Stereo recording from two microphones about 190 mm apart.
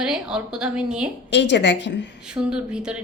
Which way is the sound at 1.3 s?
65° left (ahead or behind).